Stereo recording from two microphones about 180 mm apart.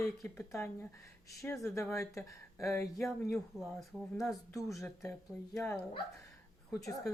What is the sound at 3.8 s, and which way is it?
Speech, centre (ahead or behind).